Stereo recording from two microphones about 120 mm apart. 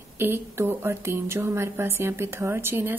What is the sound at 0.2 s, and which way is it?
Speech, 20° right (ahead or behind).